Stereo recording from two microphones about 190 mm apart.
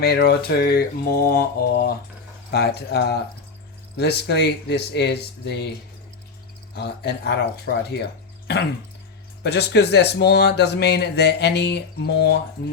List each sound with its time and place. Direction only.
0.0 s speech: 55° left (ahead or behind)
6.7 s speech: 60° left (ahead or behind)